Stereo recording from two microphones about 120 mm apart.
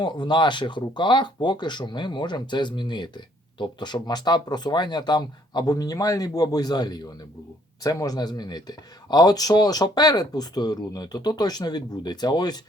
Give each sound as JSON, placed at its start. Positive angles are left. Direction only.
{"t": 0.0, "sound": "speech", "side_deg": 40}